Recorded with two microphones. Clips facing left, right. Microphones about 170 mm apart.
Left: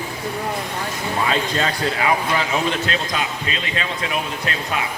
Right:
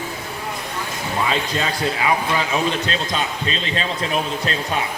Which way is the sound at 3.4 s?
30° right (ahead or behind).